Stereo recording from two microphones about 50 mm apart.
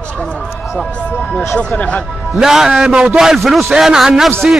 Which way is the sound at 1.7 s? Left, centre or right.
Left.